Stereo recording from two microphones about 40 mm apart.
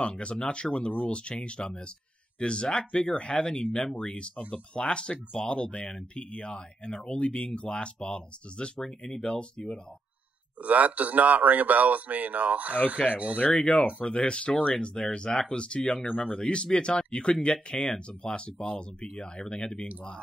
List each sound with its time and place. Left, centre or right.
0.0 s speech: left
8.7 s speech: centre
10.6 s speech: right
13.0 s speech: centre
16.1 s speech: left
16.3 s speech: left